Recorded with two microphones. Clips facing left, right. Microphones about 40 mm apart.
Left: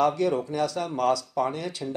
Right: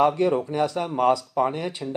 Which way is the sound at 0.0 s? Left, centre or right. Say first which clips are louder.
Right 3 dB; right.